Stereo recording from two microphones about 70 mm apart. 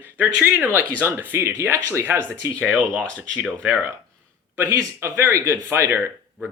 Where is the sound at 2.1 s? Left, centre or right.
Right.